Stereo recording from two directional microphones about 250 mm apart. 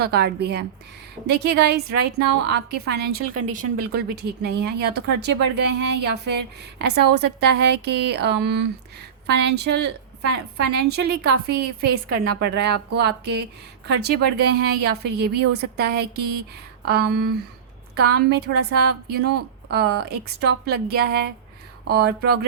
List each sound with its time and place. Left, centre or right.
0.0 s a woman's voice: right
12.0 s a woman's voice: right
12.4 s speech: right